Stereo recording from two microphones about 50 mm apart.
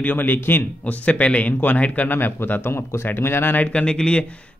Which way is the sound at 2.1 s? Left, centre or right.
Left.